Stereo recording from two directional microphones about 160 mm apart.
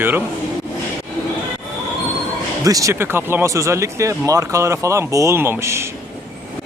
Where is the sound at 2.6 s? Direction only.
20° right (ahead or behind).